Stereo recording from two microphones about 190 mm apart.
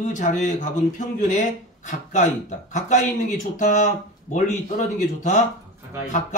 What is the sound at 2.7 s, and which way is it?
Speech, 40° left (ahead or behind).